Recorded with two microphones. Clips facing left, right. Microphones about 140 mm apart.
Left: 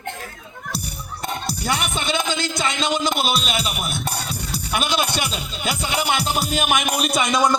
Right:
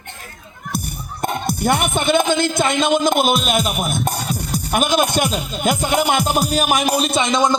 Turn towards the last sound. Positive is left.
turn(degrees=-25)  # may be behind; listen again after turning